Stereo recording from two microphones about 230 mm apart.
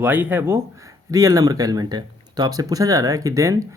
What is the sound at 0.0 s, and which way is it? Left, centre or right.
Speech, centre.